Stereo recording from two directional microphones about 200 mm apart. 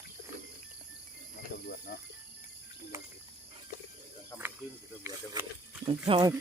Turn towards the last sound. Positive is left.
turn(degrees=-25)  # may be behind; listen again after turning